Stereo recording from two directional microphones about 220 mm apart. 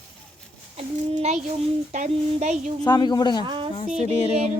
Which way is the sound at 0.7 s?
30° right (ahead or behind).